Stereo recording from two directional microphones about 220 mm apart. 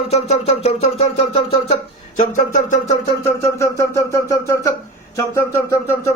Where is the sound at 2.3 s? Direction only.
35° left (ahead or behind).